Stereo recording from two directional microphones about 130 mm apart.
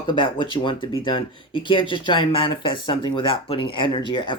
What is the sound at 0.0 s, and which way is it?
Speech, 40° left (ahead or behind).